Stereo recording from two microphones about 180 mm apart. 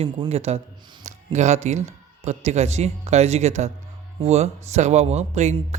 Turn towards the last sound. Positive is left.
turn(degrees=-40)  # may be behind; listen again after turning